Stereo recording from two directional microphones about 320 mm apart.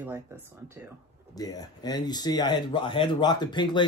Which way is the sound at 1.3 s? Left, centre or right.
Centre.